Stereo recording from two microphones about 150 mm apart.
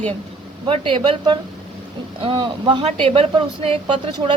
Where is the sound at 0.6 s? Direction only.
35° right (ahead or behind).